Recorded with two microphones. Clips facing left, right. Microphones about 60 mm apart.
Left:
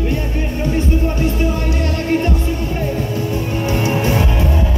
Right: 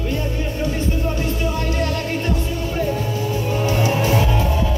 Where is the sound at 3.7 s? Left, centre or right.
Left.